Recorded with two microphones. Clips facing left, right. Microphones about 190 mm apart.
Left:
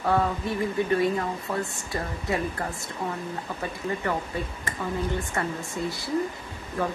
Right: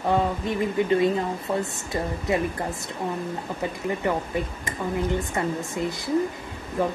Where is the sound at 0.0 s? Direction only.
20° right (ahead or behind).